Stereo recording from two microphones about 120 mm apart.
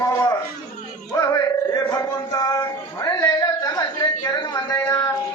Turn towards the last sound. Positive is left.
turn(degrees=30)  # may be behind; listen again after turning